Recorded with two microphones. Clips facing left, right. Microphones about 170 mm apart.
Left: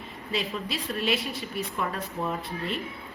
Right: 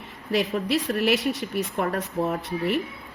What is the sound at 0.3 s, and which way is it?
A woman's voice, 70° right (ahead or behind).